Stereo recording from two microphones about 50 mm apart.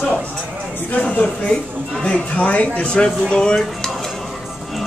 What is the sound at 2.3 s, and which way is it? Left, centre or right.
Speech, left.